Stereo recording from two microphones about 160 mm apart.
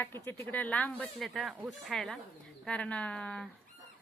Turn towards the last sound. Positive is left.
turn(degrees=5)  # may be behind; listen again after turning